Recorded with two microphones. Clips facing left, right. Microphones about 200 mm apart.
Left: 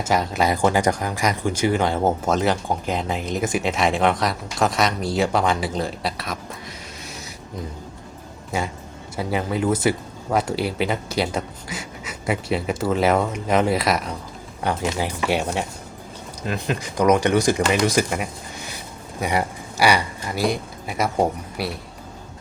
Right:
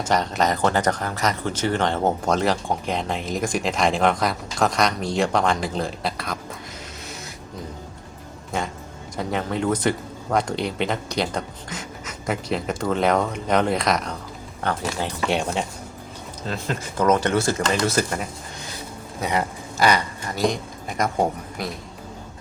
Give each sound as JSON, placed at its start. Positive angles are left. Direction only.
{"t": 0.0, "sound": "speech", "side_deg": 5}
{"t": 9.1, "sound": "speech", "side_deg": 5}